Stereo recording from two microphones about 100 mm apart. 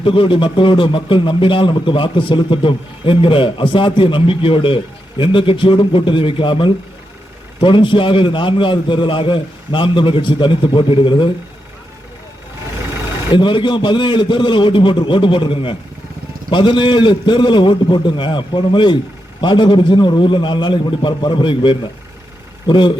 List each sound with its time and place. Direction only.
0.0 s a man's voice: 60° left (ahead or behind)
13.3 s a man's voice: 55° left (ahead or behind)